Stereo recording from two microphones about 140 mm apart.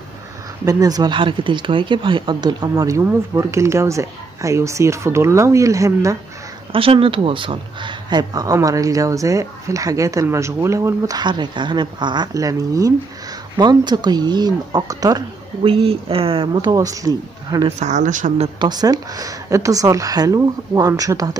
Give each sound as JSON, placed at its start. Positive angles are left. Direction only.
{"t": 0.7, "sound": "speech", "side_deg": -25}
{"t": 6.7, "sound": "speech", "side_deg": -40}
{"t": 15.8, "sound": "speech", "side_deg": -40}
{"t": 16.7, "sound": "speech", "side_deg": -25}
{"t": 17.6, "sound": "speech", "side_deg": -55}
{"t": 18.6, "sound": "speech", "side_deg": -30}